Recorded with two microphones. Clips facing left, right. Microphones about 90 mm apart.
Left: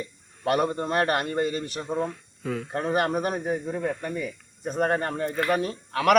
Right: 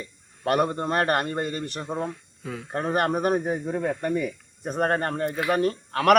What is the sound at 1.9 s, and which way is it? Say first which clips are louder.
Speech: left 4 dB; 5° right (ahead or behind).